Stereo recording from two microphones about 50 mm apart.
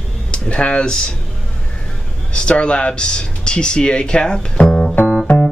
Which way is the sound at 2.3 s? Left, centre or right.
Left.